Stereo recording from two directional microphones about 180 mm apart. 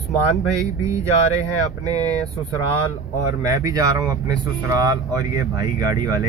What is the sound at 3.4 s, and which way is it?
Speech, 20° right (ahead or behind).